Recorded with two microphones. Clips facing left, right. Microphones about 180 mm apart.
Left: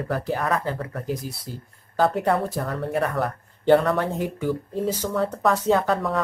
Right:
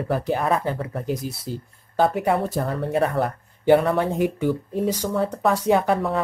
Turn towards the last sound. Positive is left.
turn(degrees=-15)  # may be behind; listen again after turning